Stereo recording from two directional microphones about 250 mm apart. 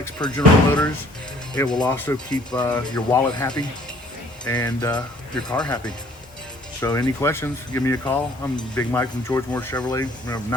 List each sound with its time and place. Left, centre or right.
0.0 s speech: centre
5.3 s speech: centre